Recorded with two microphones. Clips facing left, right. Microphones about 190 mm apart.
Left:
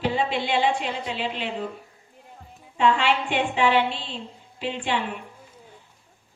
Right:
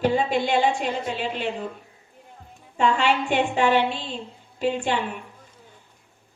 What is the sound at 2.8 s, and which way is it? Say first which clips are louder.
A woman's voice: even; 45° right (ahead or behind).